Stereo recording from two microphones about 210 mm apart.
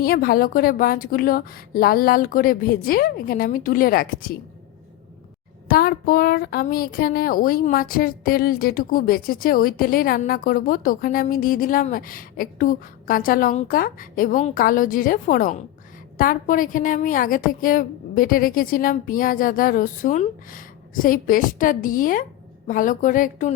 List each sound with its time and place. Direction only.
0.0 s speech: 45° left (ahead or behind)
5.6 s a woman's voice: 45° left (ahead or behind)